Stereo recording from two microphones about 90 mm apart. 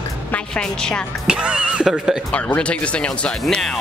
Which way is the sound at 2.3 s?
15° left (ahead or behind).